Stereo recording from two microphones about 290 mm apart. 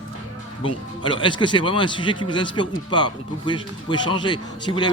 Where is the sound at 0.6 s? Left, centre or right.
Centre.